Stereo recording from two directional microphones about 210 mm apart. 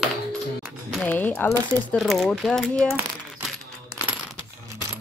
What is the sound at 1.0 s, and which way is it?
Speech, 10° left (ahead or behind).